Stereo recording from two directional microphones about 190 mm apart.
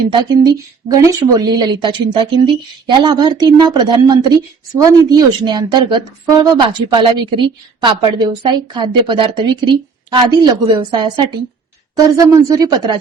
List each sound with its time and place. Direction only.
0.1 s a woman's voice: 25° right (ahead or behind)
12.1 s a woman's voice: 20° right (ahead or behind)